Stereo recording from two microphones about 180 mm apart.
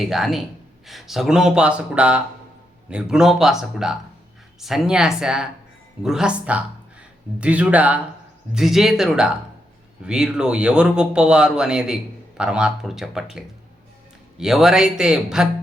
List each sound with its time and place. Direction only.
0.0 s speech: centre (ahead or behind)
14.3 s speech: centre (ahead or behind)